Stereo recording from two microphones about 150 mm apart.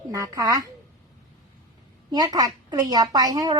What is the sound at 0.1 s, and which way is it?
Speech, 25° right (ahead or behind).